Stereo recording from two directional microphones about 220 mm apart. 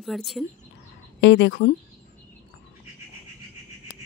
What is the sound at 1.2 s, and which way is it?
Speech, 50° left (ahead or behind).